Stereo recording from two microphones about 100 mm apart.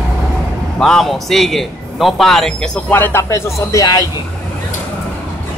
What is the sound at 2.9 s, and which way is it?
Speech, 20° left (ahead or behind).